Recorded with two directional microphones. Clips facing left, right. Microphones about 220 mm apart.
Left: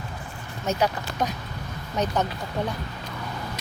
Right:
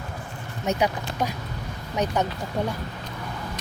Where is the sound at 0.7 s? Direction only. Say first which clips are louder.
Even; 15° right (ahead or behind).